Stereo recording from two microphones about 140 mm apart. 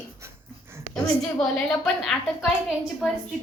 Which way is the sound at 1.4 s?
5° left (ahead or behind).